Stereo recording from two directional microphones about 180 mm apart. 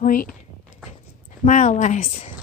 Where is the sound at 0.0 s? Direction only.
50° left (ahead or behind).